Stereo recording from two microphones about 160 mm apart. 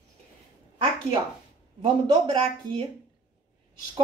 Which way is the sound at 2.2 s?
30° right (ahead or behind).